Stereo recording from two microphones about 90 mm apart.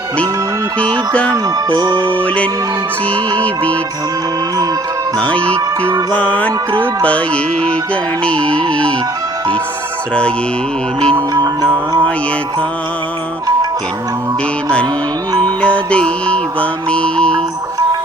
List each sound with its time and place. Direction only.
1.1 s music: 15° left (ahead or behind)
1.7 s music: 50° right (ahead or behind)
2.0 s music: 15° left (ahead or behind)
5.2 s music: 15° left (ahead or behind)
11.1 s music: 45° right (ahead or behind)
11.6 s music: 10° left (ahead or behind)
15.3 s music: 50° right (ahead or behind)
15.6 s music: 15° left (ahead or behind)